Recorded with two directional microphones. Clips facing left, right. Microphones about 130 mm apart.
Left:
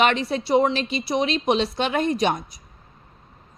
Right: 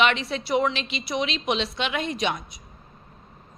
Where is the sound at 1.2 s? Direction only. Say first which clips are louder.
Left 5 dB; 40° left (ahead or behind).